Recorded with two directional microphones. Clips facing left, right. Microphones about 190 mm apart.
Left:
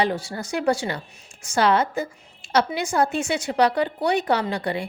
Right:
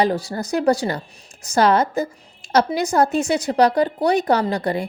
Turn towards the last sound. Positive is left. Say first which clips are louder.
# right 4 dB
turn(degrees=-40)  # may be behind; listen again after turning